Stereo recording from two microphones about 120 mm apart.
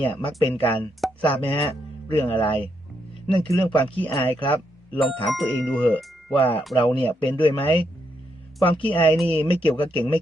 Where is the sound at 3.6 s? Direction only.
45° left (ahead or behind).